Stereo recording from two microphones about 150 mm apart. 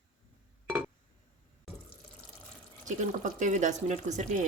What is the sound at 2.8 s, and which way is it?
Speech, 55° right (ahead or behind).